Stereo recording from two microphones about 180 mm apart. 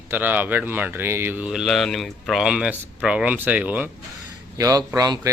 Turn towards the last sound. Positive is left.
turn(degrees=-20)  # may be behind; listen again after turning